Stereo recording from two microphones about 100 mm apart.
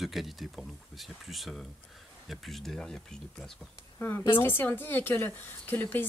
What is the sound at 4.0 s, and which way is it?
A woman's voice, 20° left (ahead or behind).